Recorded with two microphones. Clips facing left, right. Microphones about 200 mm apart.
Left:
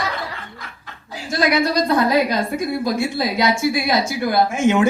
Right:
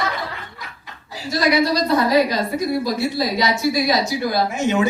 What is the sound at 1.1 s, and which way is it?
A woman's voice, 50° left (ahead or behind).